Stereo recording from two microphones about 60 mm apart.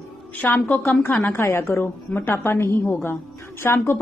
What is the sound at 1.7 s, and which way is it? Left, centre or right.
A woman's voice, left.